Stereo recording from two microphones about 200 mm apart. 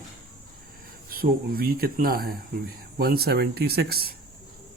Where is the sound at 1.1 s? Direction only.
45° right (ahead or behind).